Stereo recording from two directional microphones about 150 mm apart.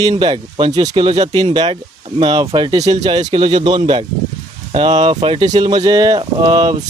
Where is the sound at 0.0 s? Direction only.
30° right (ahead or behind).